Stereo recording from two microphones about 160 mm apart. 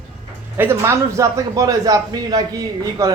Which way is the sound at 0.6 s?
15° right (ahead or behind).